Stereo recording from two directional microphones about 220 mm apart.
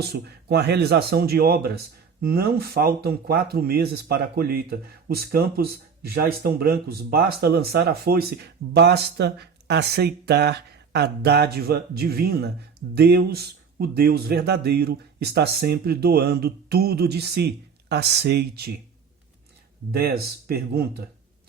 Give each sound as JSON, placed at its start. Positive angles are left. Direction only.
{"t": 0.0, "sound": "speech", "side_deg": -45}
{"t": 19.9, "sound": "speech", "side_deg": -45}